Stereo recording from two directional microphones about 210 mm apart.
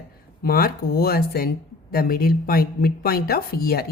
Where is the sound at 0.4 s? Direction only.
45° left (ahead or behind).